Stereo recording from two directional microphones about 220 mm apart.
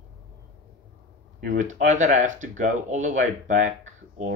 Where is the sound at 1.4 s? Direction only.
35° right (ahead or behind).